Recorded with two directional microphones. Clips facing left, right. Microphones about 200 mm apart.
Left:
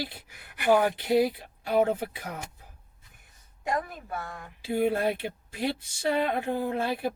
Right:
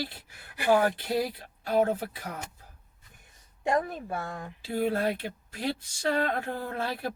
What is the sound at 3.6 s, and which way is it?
Speech, 30° right (ahead or behind).